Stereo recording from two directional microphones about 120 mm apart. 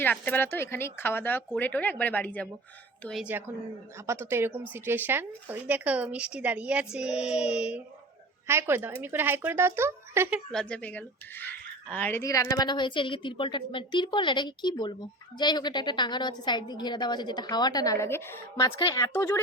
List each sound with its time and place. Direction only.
0.0 s speech: 15° left (ahead or behind)
3.9 s speech: 25° right (ahead or behind); by 7.8 s 10° right (ahead or behind)
8.4 s speech: 20° right (ahead or behind)
10.5 s speech: 5° left (ahead or behind)
12.2 s a woman's voice: 25° left (ahead or behind)